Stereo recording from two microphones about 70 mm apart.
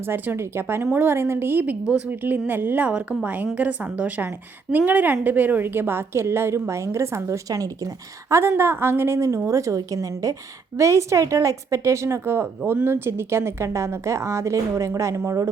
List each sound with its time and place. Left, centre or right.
0.0 s a woman's voice: right
8.4 s a woman's voice: right